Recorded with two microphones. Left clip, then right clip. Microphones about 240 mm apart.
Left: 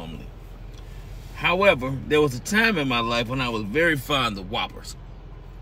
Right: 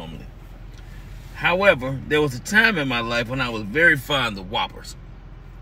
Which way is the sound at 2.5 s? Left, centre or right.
Centre.